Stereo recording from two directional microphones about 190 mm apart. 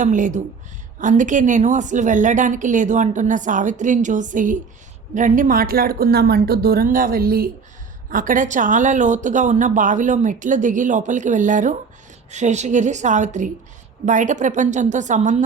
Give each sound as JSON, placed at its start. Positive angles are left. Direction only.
{"t": 0.0, "sound": "speech", "side_deg": -40}